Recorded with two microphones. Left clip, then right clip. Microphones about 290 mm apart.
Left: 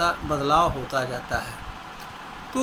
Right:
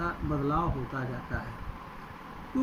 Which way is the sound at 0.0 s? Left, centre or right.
Left.